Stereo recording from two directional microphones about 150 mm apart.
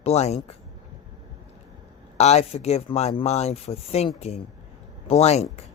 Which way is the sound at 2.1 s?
45° left (ahead or behind).